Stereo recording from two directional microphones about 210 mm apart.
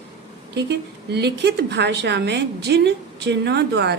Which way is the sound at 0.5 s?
55° right (ahead or behind).